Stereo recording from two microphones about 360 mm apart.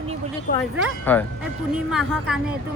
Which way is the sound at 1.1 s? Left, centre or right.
Centre.